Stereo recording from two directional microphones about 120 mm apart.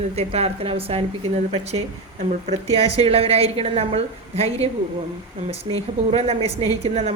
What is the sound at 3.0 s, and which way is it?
Speech, 55° right (ahead or behind).